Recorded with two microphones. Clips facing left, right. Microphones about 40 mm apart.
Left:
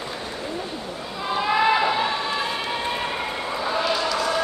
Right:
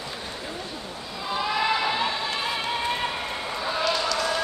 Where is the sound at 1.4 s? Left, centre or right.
Left.